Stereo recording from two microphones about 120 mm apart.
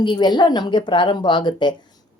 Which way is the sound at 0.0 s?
40° left (ahead or behind).